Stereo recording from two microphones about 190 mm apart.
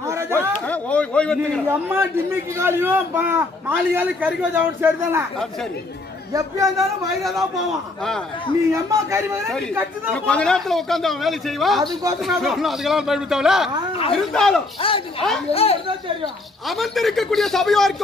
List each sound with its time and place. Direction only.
0.0 s a sound: 15° right (ahead or behind)
0.7 s a sound: 5° left (ahead or behind)
1.7 s a man's voice: 10° right (ahead or behind)
6.3 s a man's voice: 15° right (ahead or behind)
8.7 s a man's voice: 15° right (ahead or behind)
10.1 s a man's voice: 5° left (ahead or behind)
14.8 s speech: 30° left (ahead or behind)
16.6 s a man's voice: centre (ahead or behind)